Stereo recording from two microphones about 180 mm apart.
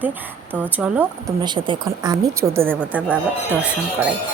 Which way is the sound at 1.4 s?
25° right (ahead or behind).